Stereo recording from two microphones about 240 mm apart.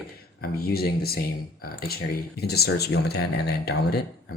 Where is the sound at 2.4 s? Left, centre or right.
Left.